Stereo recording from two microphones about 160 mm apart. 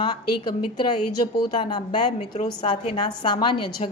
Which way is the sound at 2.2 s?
40° left (ahead or behind).